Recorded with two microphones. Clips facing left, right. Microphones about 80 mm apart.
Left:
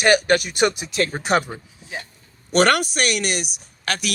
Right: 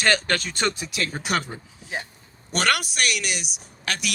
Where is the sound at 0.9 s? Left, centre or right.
Left.